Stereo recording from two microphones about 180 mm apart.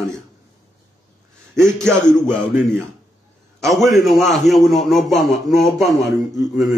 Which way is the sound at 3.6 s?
Centre (ahead or behind).